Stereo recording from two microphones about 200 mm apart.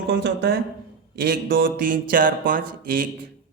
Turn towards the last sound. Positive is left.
turn(degrees=-45)  # may be behind; listen again after turning